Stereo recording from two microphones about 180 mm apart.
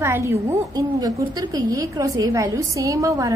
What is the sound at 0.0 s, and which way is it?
A woman's voice, 15° right (ahead or behind).